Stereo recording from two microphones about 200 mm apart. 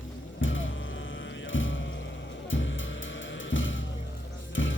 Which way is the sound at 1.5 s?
70° left (ahead or behind).